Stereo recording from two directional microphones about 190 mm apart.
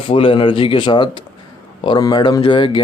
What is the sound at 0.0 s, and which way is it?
Speech, 30° left (ahead or behind).